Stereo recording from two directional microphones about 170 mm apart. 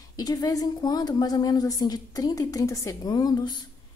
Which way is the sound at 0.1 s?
25° left (ahead or behind).